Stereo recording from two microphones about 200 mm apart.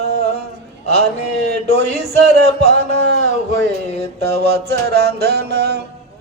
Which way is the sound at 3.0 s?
55° right (ahead or behind).